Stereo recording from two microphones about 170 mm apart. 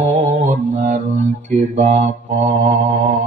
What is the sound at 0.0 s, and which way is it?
Mantra, 50° right (ahead or behind).